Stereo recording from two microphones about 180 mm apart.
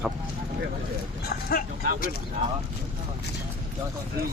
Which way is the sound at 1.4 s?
55° left (ahead or behind).